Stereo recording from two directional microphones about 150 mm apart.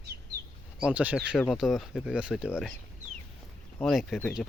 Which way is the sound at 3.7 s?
Centre (ahead or behind).